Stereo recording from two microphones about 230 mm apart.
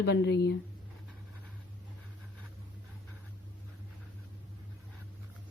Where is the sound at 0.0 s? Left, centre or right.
Left.